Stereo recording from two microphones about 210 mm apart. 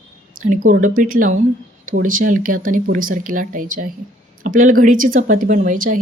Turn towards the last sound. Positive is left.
turn(degrees=-40)  # may be behind; listen again after turning